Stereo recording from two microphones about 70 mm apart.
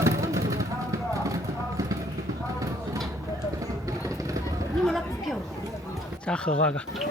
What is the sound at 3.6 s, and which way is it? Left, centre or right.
Vehicle, right.